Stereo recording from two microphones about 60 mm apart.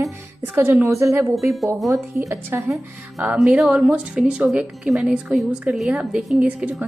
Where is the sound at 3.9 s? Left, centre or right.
Centre.